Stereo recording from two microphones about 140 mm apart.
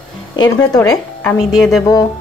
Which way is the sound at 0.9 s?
10° left (ahead or behind).